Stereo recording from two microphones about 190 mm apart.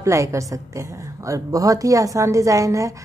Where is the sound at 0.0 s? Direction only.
15° right (ahead or behind).